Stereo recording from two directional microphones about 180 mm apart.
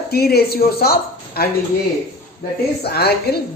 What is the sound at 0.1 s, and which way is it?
A woman's voice, 60° left (ahead or behind).